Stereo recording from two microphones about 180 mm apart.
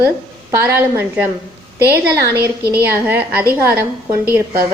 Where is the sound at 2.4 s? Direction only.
60° right (ahead or behind).